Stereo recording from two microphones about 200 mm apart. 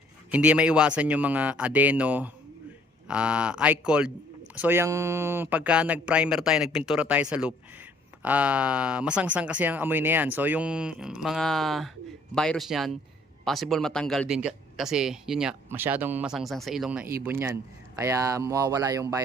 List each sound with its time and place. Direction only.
0.3 s speech: 5° right (ahead or behind)